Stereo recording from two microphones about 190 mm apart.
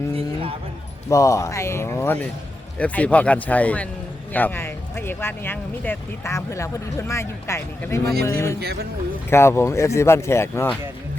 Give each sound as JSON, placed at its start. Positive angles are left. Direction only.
{"t": 0.1, "sound": "a sound", "side_deg": -30}
{"t": 1.1, "sound": "speech", "side_deg": 15}
{"t": 8.6, "sound": "speech", "side_deg": -55}
{"t": 9.3, "sound": "speech", "side_deg": 15}